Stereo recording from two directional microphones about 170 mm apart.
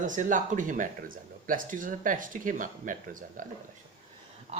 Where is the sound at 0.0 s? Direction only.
50° right (ahead or behind).